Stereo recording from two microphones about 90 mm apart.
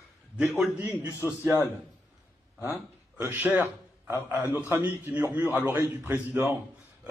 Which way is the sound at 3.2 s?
25° right (ahead or behind).